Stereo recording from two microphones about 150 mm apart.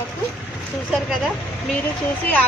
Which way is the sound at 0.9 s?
Centre (ahead or behind).